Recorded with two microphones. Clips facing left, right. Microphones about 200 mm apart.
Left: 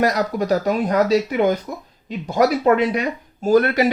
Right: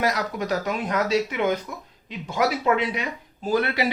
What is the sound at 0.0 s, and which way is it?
Speech, 40° left (ahead or behind).